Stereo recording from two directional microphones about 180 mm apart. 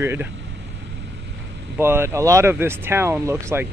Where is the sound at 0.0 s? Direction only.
15° right (ahead or behind).